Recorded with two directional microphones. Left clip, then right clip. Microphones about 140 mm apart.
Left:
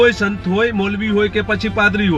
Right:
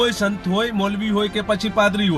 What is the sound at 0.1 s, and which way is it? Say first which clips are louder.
A man's voice: left 3 dB; centre (ahead or behind).